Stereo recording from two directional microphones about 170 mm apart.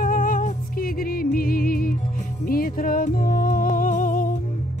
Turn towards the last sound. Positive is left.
turn(degrees=50)  # may be behind; listen again after turning